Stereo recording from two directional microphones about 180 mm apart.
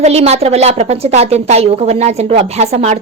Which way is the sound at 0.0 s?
35° right (ahead or behind).